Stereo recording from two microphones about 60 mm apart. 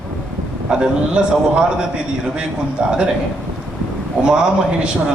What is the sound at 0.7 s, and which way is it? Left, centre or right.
Speech, centre.